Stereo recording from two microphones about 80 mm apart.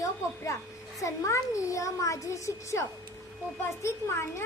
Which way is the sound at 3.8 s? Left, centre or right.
Left.